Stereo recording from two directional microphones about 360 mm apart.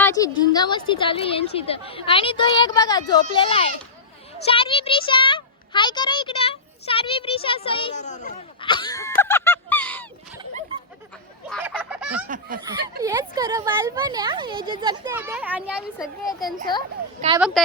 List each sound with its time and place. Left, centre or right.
0.0 s a woman's voice: centre
11.4 s fowl: centre
12.3 s speech: right
13.0 s speech: centre
17.2 s speech: centre